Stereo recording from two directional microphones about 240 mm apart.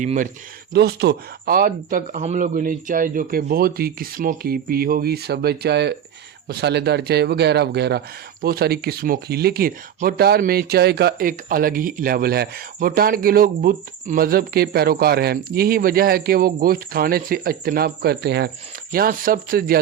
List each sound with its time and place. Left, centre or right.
0.0 s a man's voice: right
0.7 s a man's voice: right